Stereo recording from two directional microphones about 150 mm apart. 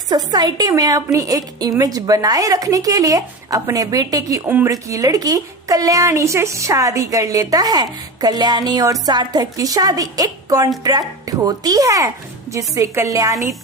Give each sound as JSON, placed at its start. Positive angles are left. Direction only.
{"t": 0.3, "sound": "speech", "side_deg": -30}